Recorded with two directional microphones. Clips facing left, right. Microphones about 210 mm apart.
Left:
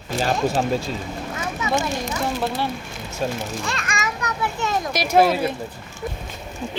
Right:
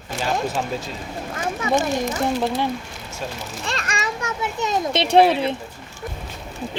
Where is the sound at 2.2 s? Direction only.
20° right (ahead or behind).